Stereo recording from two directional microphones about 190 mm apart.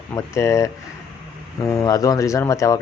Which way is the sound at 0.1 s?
15° left (ahead or behind).